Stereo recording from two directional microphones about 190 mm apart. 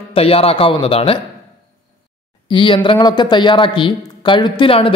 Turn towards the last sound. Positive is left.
turn(degrees=30)  # may be behind; listen again after turning